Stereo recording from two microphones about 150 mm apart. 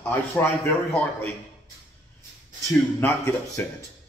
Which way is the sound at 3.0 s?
15° left (ahead or behind).